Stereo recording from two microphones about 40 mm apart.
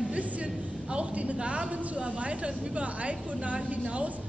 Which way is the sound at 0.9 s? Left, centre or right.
Right.